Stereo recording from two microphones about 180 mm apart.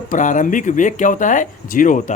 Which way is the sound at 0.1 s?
45° left (ahead or behind).